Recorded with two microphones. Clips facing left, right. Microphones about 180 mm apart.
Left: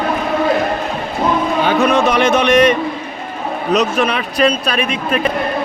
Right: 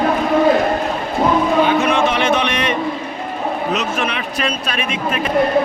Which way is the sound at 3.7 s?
35° left (ahead or behind).